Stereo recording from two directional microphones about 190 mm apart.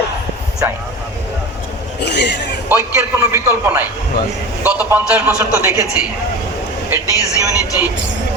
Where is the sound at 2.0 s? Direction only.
65° left (ahead or behind).